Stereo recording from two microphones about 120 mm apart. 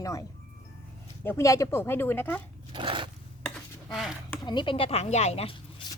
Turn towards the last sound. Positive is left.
turn(degrees=55)  # may be behind; listen again after turning